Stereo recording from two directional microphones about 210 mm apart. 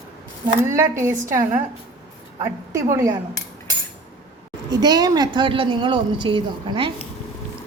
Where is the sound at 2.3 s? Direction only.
15° right (ahead or behind).